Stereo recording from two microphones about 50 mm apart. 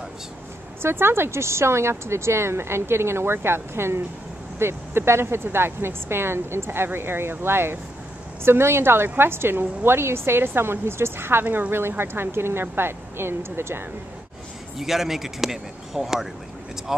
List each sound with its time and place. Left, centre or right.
0.8 s speech: right
11.4 s speech: right
11.9 s speech: right
14.8 s speech: centre